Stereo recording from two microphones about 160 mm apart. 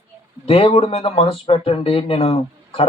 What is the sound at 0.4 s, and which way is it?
Speech, 35° left (ahead or behind).